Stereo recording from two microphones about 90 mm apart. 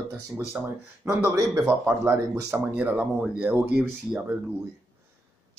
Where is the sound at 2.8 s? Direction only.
15° right (ahead or behind).